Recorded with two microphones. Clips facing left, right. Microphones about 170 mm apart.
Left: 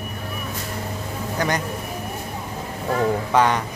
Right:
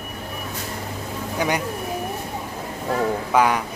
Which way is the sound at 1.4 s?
10° right (ahead or behind).